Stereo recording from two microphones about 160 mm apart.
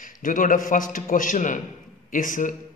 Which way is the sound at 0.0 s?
55° left (ahead or behind).